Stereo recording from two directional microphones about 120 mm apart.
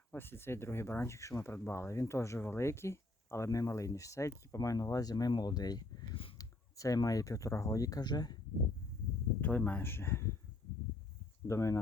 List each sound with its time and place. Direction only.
0.1 s speech: 20° left (ahead or behind); by 8.4 s 35° left (ahead or behind)
9.4 s speech: 15° left (ahead or behind)
11.4 s speech: 25° left (ahead or behind)